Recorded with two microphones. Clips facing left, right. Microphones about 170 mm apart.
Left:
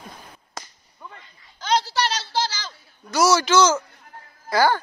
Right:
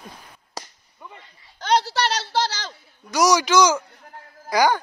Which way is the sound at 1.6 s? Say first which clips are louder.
Right 2 dB; 65° right (ahead or behind).